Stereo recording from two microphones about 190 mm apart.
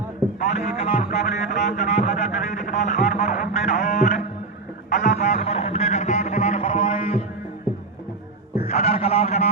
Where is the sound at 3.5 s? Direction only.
35° left (ahead or behind).